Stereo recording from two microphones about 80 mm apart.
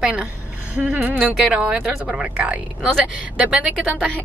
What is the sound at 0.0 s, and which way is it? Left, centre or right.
A woman's voice, centre.